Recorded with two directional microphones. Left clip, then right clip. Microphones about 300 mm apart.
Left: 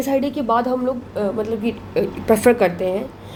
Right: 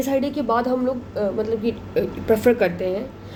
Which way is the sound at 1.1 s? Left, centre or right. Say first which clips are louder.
Right 1 dB; left.